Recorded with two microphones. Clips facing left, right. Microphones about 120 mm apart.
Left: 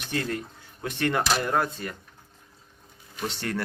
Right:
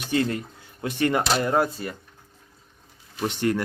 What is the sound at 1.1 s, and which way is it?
Speech, 10° right (ahead or behind).